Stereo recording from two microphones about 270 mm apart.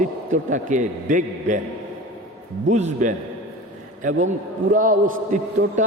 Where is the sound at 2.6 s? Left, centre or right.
Right.